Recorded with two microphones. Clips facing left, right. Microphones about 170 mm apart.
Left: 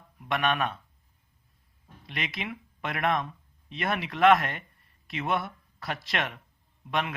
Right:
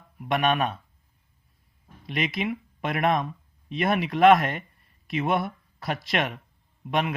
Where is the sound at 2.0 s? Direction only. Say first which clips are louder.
Right 8 dB; 15° right (ahead or behind).